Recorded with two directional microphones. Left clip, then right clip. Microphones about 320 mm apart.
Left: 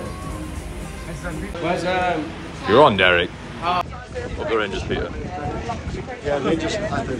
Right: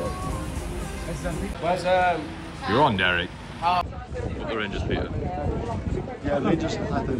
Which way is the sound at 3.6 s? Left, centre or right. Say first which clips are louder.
Left 1 dB; right.